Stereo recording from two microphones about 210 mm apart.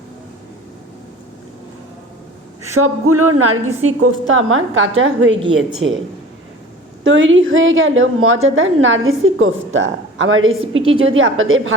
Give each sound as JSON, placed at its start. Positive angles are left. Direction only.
{"t": 2.7, "sound": "a woman's voice", "side_deg": -90}
{"t": 7.0, "sound": "a woman's voice", "side_deg": -65}